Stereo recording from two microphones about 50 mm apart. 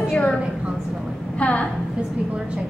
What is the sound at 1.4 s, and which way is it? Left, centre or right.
Speech, left.